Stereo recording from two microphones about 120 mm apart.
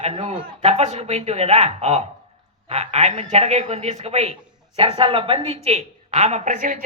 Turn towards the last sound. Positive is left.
turn(degrees=-90)